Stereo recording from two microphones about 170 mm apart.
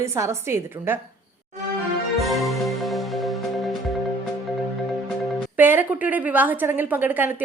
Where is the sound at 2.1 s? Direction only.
Centre (ahead or behind).